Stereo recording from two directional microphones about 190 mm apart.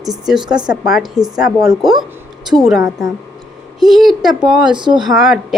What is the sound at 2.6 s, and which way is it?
Speech, centre (ahead or behind).